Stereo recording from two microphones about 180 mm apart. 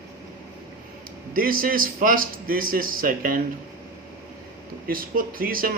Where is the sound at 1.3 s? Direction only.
50° right (ahead or behind).